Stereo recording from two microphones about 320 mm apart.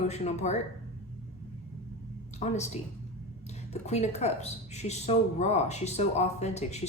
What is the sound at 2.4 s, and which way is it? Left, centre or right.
Speech, left.